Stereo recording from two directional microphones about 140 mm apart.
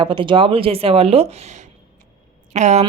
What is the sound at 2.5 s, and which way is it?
Speech, 55° right (ahead or behind).